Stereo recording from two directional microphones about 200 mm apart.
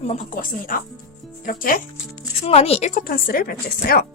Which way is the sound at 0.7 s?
45° left (ahead or behind).